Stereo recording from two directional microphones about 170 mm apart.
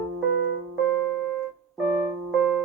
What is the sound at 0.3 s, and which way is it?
Keyboard, 90° left.